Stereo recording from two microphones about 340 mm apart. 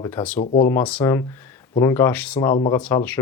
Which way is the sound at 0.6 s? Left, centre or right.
Centre.